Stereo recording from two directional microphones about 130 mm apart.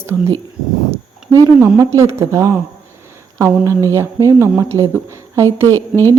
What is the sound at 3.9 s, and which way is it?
A woman's voice, 20° right (ahead or behind).